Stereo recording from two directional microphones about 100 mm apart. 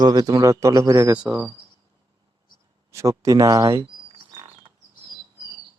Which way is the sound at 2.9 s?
30° right (ahead or behind).